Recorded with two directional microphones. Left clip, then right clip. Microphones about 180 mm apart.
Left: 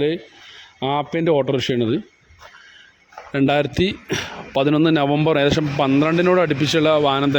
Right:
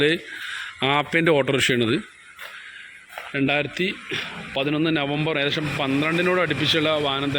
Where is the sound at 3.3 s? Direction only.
35° left (ahead or behind).